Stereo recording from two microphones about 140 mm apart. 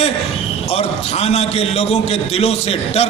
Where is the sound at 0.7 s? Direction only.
50° left (ahead or behind).